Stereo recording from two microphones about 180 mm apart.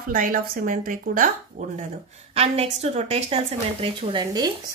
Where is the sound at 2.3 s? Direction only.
35° right (ahead or behind).